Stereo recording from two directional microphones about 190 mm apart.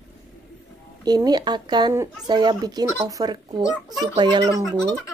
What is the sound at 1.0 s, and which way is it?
Speech, 20° right (ahead or behind).